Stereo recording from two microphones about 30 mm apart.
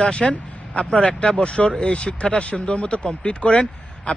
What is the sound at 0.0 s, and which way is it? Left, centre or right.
Speech, left.